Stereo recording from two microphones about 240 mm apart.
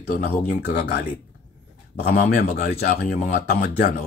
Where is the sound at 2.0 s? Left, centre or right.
Left.